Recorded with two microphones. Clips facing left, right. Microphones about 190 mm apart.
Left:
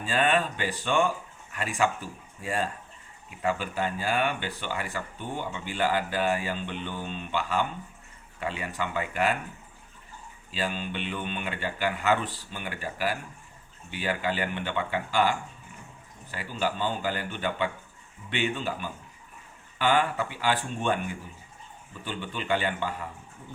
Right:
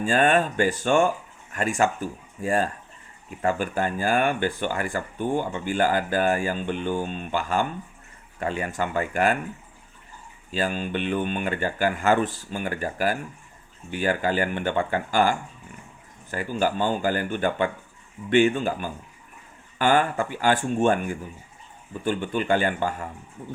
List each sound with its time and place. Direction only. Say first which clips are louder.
0.0 s speech: right 5 dB; 45° right (ahead or behind)
10.5 s speech: right 5 dB; 45° right (ahead or behind)